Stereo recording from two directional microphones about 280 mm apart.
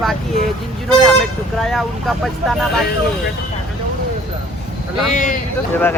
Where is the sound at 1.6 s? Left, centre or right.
Centre.